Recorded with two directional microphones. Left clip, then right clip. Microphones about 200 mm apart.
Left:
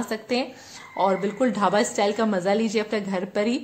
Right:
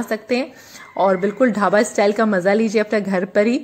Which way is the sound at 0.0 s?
20° right (ahead or behind).